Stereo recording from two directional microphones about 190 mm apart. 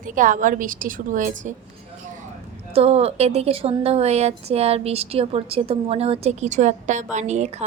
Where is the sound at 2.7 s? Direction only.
30° right (ahead or behind).